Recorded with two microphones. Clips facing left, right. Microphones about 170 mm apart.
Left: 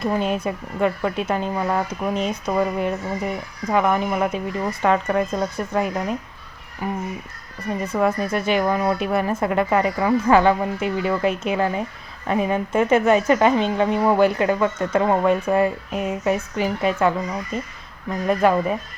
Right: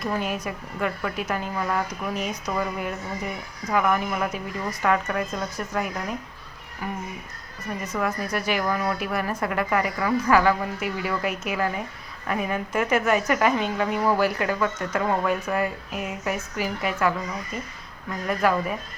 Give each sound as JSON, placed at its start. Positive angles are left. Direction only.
{"t": 0.0, "sound": "a woman's voice", "side_deg": 25}